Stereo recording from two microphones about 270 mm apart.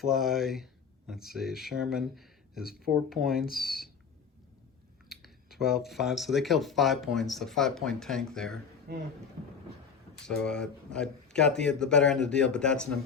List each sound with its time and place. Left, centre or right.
0.0 s speech: centre
5.0 s typing: centre
5.9 s speech: centre
8.9 s speech: right
10.2 s speech: centre